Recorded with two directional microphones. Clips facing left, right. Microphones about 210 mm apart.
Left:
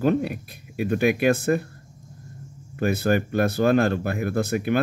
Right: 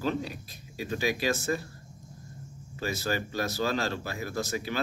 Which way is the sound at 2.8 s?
55° left (ahead or behind).